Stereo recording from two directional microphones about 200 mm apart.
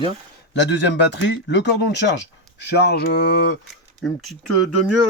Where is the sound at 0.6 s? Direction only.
60° left (ahead or behind).